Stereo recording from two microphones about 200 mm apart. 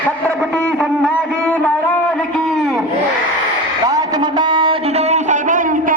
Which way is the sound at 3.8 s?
20° right (ahead or behind).